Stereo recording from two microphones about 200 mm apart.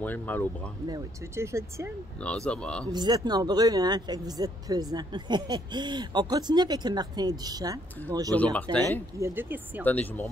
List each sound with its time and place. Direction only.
0.0 s speech: 10° left (ahead or behind)
0.8 s speech: 15° right (ahead or behind)
2.1 s speech: 5° left (ahead or behind)
2.9 s speech: 20° right (ahead or behind)
9.2 s speech: 10° right (ahead or behind)
9.8 s speech: 10° left (ahead or behind)